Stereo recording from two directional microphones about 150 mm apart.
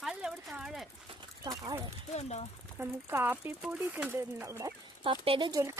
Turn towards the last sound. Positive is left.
turn(degrees=-35)  # may be behind; listen again after turning